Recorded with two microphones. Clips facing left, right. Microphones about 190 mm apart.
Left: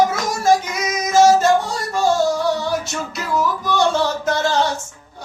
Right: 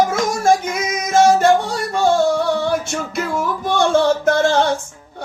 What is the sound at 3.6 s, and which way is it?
Music, 55° right (ahead or behind).